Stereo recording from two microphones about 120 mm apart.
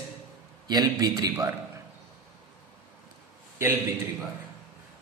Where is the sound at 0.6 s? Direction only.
35° right (ahead or behind).